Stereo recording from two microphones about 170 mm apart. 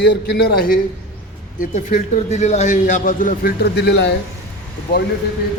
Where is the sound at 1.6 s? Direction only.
45° left (ahead or behind); by 4.1 s 85° left.